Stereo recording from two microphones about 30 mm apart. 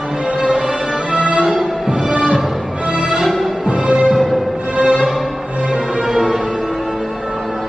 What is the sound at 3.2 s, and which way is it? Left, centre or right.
Music, centre.